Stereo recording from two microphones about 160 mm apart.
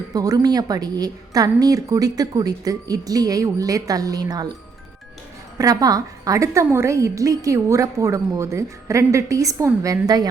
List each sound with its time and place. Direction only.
0.1 s a woman's voice: 25° right (ahead or behind)
5.5 s a woman's voice: 20° right (ahead or behind)